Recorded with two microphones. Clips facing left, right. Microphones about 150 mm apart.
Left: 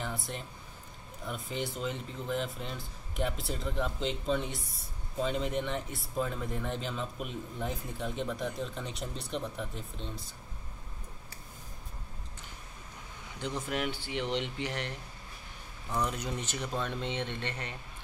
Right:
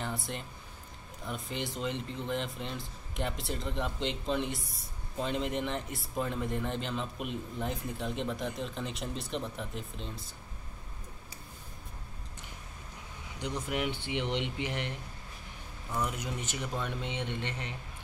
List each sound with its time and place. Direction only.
0.0 s speech: centre (ahead or behind)
13.4 s speech: 15° right (ahead or behind)